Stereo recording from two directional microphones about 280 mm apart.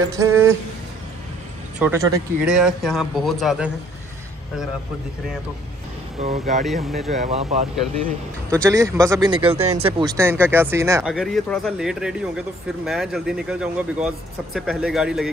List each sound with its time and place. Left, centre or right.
0.2 s speech: centre
1.8 s speech: centre
6.1 s speech: right
6.6 s speech: centre
7.1 s speech: right
8.6 s speech: centre